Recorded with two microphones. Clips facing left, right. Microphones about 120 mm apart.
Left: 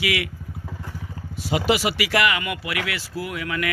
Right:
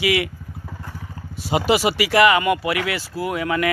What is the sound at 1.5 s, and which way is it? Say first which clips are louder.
Speech: right 3 dB; 35° right (ahead or behind).